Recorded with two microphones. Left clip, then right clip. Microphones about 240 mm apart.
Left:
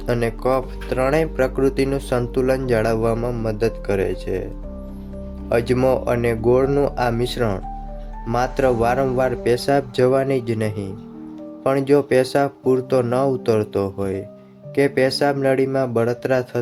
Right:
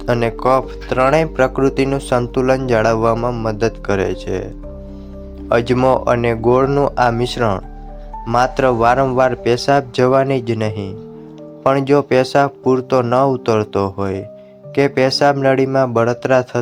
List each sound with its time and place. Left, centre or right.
0.0 s speech: centre
5.5 s speech: centre